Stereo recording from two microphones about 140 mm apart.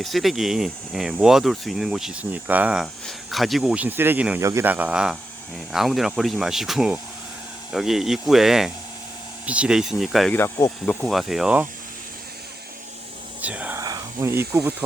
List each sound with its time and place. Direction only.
0.0 s speech: centre (ahead or behind)
2.8 s speech: centre (ahead or behind)
10.3 s speech: 15° left (ahead or behind)
11.0 s speech: centre (ahead or behind)
13.4 s speech: 10° right (ahead or behind)
13.7 s insect: 25° right (ahead or behind)